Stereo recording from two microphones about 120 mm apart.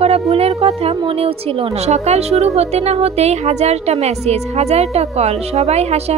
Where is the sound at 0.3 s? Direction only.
60° right (ahead or behind).